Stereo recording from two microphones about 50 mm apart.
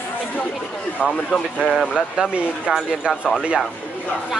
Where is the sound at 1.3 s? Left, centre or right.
Centre.